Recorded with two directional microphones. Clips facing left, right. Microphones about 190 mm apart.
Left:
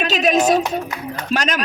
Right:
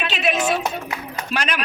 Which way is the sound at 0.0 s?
40° left (ahead or behind).